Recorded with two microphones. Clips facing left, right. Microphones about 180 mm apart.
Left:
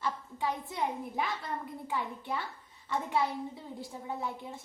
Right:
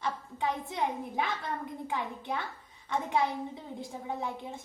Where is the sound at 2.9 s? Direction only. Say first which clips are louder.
Right 1 dB; 20° right (ahead or behind).